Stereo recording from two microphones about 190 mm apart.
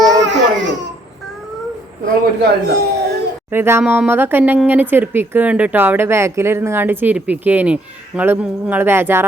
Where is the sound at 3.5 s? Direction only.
10° right (ahead or behind).